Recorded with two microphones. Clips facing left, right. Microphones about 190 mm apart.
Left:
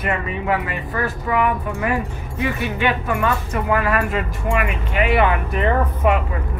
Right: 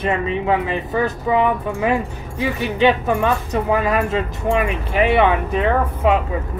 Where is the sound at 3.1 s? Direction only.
20° right (ahead or behind).